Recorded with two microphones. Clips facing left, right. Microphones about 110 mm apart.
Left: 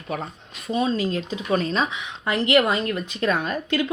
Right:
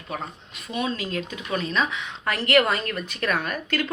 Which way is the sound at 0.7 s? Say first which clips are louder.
Left 5 dB; 35° left (ahead or behind).